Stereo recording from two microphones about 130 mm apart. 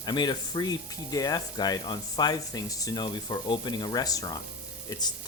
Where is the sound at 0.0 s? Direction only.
35° left (ahead or behind).